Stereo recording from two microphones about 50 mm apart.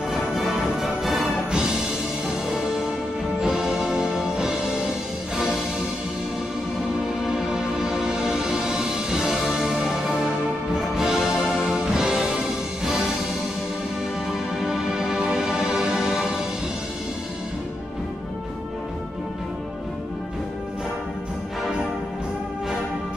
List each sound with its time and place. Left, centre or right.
0.1 s music: centre
1.5 s music: centre
3.3 s music: centre
7.2 s music: centre
14.6 s music: centre